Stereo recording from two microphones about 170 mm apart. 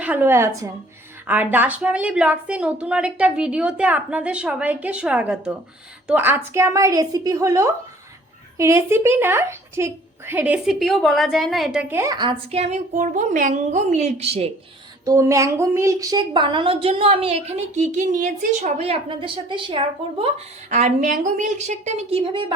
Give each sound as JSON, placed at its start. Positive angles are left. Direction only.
{"t": 0.0, "sound": "a woman's voice", "side_deg": -10}
{"t": 12.5, "sound": "a woman's voice", "side_deg": -40}
{"t": 15.0, "sound": "a woman's voice", "side_deg": -20}